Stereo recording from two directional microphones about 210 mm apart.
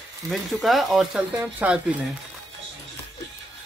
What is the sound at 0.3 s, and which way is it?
Speech, centre (ahead or behind).